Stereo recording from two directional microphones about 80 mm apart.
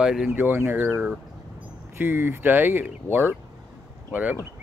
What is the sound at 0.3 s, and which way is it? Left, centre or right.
Speech, right.